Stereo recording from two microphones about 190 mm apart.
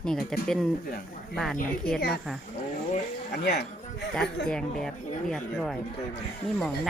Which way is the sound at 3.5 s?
60° left (ahead or behind).